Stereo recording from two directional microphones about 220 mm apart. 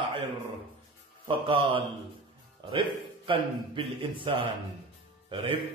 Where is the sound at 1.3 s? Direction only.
25° right (ahead or behind).